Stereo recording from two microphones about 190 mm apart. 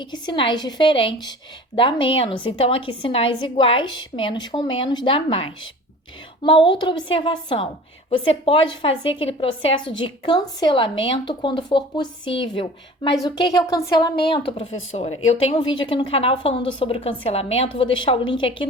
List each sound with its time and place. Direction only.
0.0 s a woman's voice: 25° left (ahead or behind)